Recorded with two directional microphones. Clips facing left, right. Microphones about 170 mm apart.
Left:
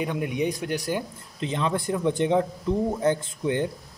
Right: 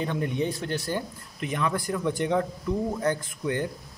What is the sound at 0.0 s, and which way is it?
A man's voice, 10° left (ahead or behind).